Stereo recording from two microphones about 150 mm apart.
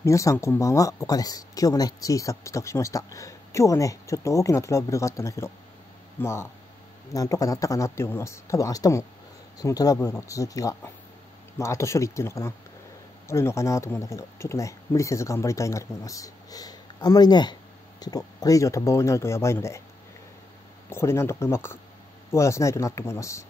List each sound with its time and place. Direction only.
0.0 s speech: 20° left (ahead or behind)
20.9 s speech: 15° left (ahead or behind)